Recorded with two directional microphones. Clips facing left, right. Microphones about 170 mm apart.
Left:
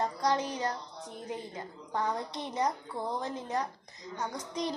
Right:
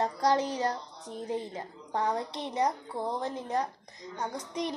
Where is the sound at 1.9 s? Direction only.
30° right (ahead or behind).